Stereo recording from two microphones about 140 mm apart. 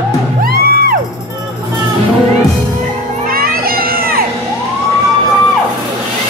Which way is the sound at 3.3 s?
90° right.